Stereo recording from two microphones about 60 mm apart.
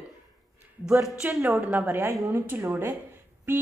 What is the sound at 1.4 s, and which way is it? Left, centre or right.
A woman's voice, right.